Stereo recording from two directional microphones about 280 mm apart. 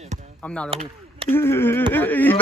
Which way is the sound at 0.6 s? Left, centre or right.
Centre.